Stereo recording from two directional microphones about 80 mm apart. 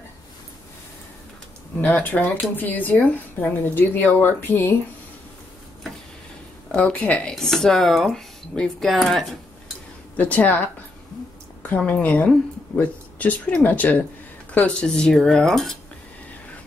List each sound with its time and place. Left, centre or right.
1.8 s speech: centre
6.7 s speech: centre
10.1 s speech: centre
11.6 s speech: left; by 15.8 s centre